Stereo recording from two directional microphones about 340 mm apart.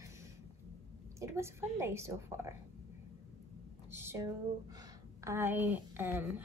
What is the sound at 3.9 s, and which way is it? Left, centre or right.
A woman's voice, centre.